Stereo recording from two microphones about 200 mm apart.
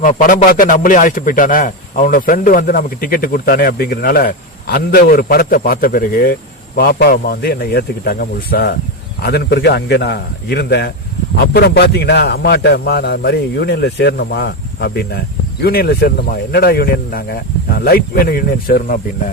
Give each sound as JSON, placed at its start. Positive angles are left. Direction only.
{"t": 0.0, "sound": "a man's voice", "side_deg": 40}